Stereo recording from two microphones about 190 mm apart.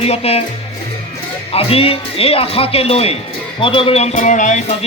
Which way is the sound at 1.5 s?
30° left (ahead or behind).